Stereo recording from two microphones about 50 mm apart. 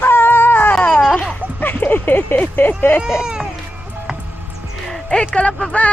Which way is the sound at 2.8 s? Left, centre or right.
Left.